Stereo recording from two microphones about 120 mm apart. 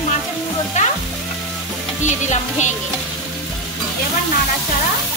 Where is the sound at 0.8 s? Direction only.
80° left.